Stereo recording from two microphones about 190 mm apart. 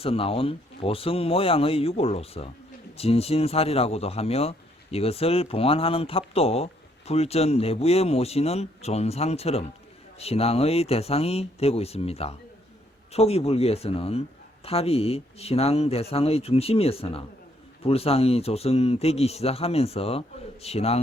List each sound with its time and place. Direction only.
0.0 s speech: 30° left (ahead or behind)